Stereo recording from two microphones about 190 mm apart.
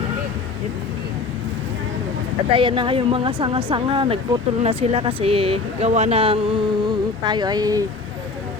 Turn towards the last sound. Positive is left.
turn(degrees=-20)  # may be behind; listen again after turning